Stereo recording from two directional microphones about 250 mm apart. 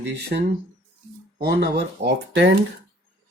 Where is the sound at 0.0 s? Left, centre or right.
Right.